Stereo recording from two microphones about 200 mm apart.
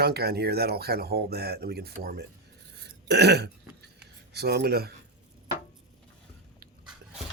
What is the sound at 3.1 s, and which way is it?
Burping, 55° right (ahead or behind).